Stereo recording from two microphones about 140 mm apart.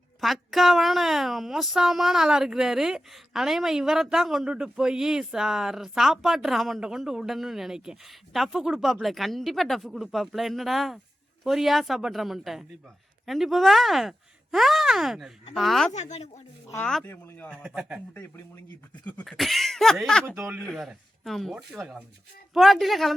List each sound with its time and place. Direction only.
0.2 s speech: centre (ahead or behind)
15.9 s speech: 55° left (ahead or behind)
16.7 s speech: 10° left (ahead or behind)
17.7 s speech: 5° right (ahead or behind)
18.1 s speech: 15° left (ahead or behind)